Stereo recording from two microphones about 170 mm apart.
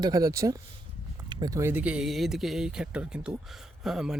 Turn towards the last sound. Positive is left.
turn(degrees=-5)  # may be behind; listen again after turning